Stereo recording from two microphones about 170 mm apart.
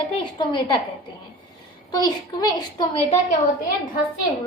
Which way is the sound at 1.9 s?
25° left (ahead or behind).